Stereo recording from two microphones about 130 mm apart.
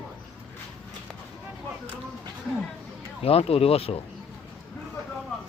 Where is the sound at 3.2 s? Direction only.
50° left (ahead or behind).